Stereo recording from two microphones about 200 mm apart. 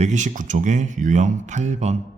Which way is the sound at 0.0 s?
35° right (ahead or behind).